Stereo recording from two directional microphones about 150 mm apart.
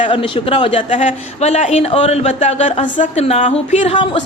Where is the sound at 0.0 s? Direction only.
35° left (ahead or behind).